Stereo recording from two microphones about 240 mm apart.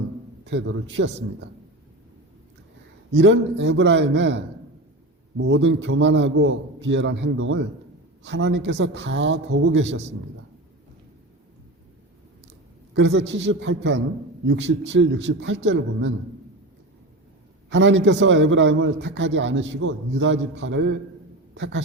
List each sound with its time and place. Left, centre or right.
0.4 s a man's voice: right
3.1 s a man's voice: right
12.9 s a man's voice: right
17.7 s a man's voice: right